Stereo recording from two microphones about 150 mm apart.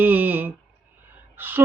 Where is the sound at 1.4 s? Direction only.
15° right (ahead or behind).